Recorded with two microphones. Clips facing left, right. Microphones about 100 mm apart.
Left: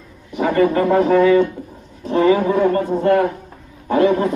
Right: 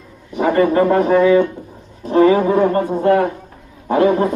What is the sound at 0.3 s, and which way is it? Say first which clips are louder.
A man's voice: right 2 dB; 30° right (ahead or behind).